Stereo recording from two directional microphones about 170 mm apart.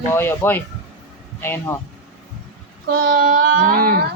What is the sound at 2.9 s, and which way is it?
Child singing, 60° right (ahead or behind).